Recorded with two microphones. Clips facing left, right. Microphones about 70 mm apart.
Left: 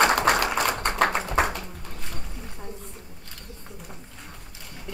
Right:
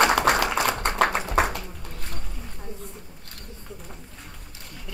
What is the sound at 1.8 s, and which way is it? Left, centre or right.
Boat, left.